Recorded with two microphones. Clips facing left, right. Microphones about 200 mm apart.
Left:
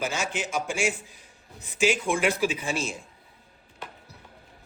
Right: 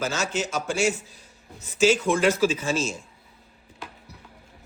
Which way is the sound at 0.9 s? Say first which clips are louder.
Right 4 dB; 40° right (ahead or behind).